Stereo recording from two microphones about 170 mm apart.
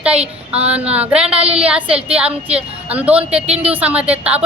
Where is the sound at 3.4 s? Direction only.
35° right (ahead or behind).